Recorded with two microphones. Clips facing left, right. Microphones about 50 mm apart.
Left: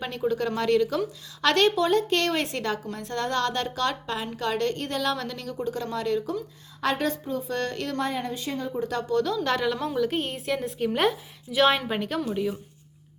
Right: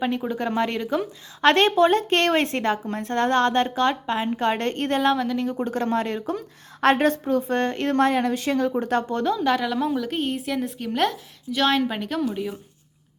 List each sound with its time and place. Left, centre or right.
0.0 s speech: centre; by 5.1 s right
5.1 s speech: centre
5.5 s a woman's voice: right
7.4 s speech: right
7.9 s speech: right
8.9 s speech: right
9.4 s a woman's voice: centre